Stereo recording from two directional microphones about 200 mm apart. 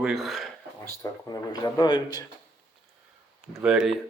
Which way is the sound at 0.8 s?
20° left (ahead or behind).